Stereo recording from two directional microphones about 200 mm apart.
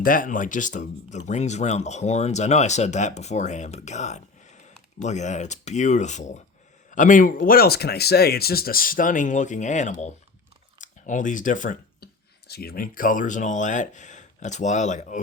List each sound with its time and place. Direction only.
0.0 s speech: 45° left (ahead or behind)
10.8 s a sound: 40° left (ahead or behind)
12.5 s speech: 50° left (ahead or behind)